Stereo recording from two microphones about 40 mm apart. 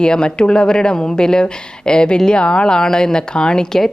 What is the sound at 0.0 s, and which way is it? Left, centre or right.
Speech, left.